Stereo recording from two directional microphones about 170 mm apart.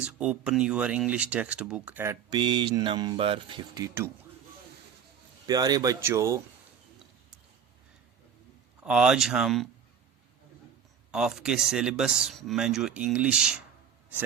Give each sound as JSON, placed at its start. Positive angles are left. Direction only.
{"t": 0.0, "sound": "speech", "side_deg": -5}
{"t": 2.3, "sound": "speech", "side_deg": -25}
{"t": 5.5, "sound": "speech", "side_deg": -20}
{"t": 8.8, "sound": "speech", "side_deg": -5}
{"t": 11.1, "sound": "speech", "side_deg": -5}